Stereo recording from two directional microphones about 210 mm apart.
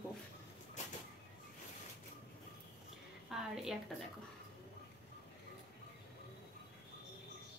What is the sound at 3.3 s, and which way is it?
Speech, centre (ahead or behind).